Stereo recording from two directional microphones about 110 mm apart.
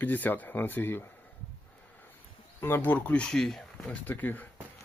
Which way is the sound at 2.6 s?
20° left (ahead or behind).